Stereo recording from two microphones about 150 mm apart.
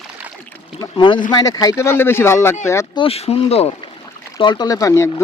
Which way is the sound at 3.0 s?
40° left (ahead or behind).